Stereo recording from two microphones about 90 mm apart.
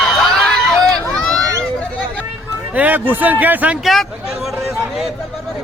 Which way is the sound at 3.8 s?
Centre (ahead or behind).